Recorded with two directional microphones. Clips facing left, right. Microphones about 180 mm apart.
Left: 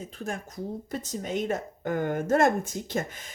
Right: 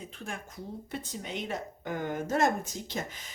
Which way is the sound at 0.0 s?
40° left (ahead or behind).